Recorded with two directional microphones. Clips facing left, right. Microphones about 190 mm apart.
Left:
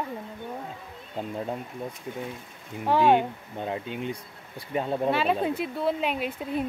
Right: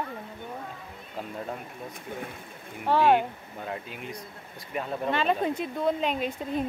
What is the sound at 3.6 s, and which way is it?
Speech, 25° left (ahead or behind).